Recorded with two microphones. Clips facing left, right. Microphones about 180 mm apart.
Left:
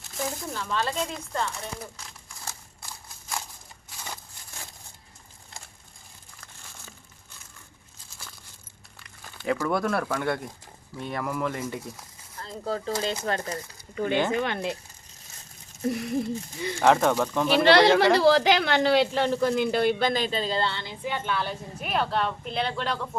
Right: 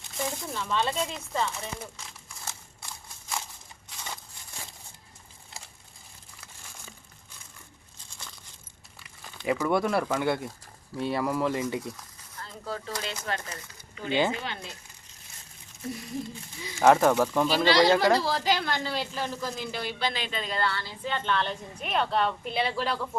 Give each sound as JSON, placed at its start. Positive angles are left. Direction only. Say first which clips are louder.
{"t": 0.1, "sound": "a sound", "louder": "left 1 dB", "side_deg": 0}
{"t": 9.0, "sound": "crumpling", "louder": "left 1 dB", "side_deg": 0}
{"t": 9.6, "sound": "speech", "louder": "right 2 dB", "side_deg": 0}
{"t": 11.3, "sound": "speech", "louder": "even", "side_deg": -25}
{"t": 11.9, "sound": "speech", "louder": "left 2 dB", "side_deg": 30}
{"t": 14.3, "sound": "speech", "louder": "left 10 dB", "side_deg": 60}
{"t": 15.9, "sound": "a sound", "louder": "left 8 dB", "side_deg": 70}
{"t": 16.6, "sound": "speech", "louder": "left 9 dB", "side_deg": 65}
{"t": 16.8, "sound": "speech", "louder": "right 1 dB", "side_deg": -5}
{"t": 17.6, "sound": "speech", "louder": "left 4 dB", "side_deg": 65}